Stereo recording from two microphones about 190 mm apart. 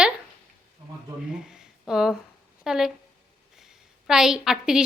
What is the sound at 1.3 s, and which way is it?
A woman's voice, 5° right (ahead or behind).